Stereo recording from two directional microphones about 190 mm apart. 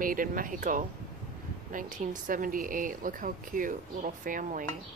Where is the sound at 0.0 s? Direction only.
45° right (ahead or behind).